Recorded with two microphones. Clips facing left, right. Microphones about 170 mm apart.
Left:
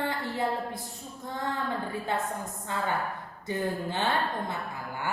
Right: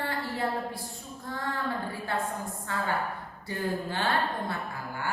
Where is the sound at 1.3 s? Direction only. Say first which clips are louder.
Left 1 dB; 20° left (ahead or behind).